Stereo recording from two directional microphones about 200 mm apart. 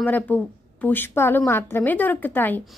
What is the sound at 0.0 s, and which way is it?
A woman's voice, 10° left (ahead or behind).